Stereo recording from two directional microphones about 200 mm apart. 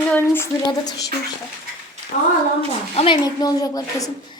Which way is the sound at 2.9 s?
30° left (ahead or behind).